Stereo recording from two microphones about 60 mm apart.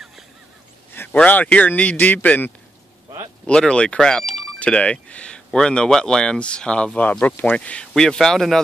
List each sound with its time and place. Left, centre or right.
1.1 s a man's voice: left
3.4 s a man's voice: centre